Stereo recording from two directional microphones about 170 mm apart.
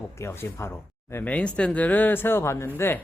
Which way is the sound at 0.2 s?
15° left (ahead or behind).